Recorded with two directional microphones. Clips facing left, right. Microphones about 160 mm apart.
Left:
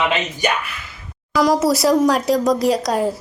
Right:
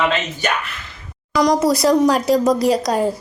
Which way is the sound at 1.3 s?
5° left (ahead or behind).